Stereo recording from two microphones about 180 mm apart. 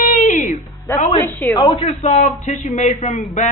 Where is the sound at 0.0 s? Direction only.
45° left (ahead or behind).